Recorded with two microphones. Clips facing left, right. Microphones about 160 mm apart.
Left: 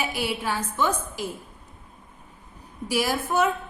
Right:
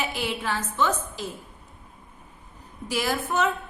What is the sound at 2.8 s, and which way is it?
Speech, 10° left (ahead or behind).